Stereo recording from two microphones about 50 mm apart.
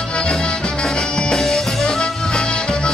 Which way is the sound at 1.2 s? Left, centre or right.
Centre.